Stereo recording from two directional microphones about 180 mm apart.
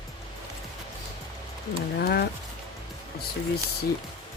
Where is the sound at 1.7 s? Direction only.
65° left (ahead or behind).